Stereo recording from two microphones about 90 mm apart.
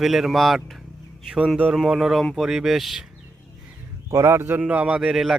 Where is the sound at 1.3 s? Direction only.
15° right (ahead or behind).